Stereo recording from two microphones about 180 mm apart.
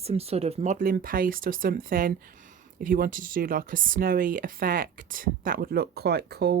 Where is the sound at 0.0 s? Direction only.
35° right (ahead or behind).